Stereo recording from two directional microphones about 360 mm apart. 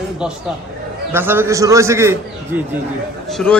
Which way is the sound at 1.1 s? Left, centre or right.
Centre.